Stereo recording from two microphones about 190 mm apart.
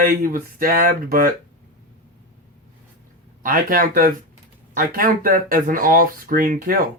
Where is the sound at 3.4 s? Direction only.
50° right (ahead or behind).